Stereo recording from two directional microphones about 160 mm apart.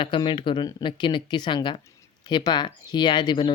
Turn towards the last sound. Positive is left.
turn(degrees=30)  # may be behind; listen again after turning